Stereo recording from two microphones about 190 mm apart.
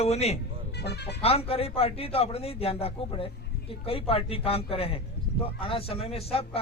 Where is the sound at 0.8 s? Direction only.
60° left (ahead or behind).